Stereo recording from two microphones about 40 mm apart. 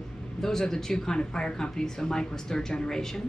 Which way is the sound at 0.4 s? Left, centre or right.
Centre.